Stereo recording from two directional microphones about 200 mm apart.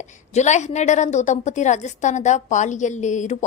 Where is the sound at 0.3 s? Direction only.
35° left (ahead or behind).